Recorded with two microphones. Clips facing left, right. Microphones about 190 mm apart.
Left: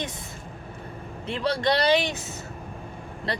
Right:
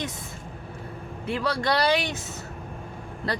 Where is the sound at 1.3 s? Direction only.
25° left (ahead or behind).